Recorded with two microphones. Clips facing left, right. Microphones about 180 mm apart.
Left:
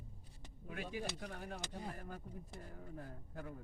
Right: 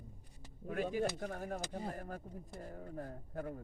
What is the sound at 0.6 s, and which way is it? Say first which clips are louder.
Speech: right 8 dB; 50° right (ahead or behind).